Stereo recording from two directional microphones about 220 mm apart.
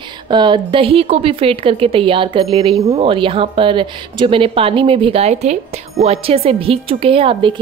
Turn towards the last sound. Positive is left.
turn(degrees=-25)  # may be behind; listen again after turning